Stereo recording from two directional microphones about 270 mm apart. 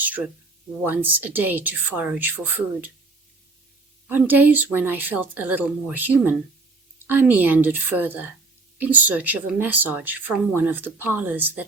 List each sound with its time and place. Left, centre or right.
0.0 s a sound: centre
0.9 s speech: centre
4.1 s speech: centre